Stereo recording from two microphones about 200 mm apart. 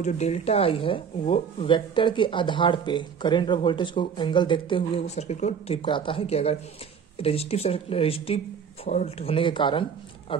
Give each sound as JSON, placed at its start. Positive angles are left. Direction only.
{"t": 0.0, "sound": "speech", "side_deg": 35}